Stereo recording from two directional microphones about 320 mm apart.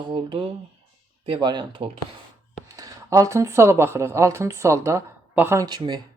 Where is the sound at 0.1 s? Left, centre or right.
Centre.